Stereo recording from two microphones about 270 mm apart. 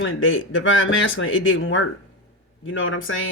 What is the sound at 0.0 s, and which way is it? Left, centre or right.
Speech, left.